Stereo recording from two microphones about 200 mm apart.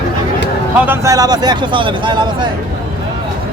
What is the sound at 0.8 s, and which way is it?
A man's voice, 15° right (ahead or behind).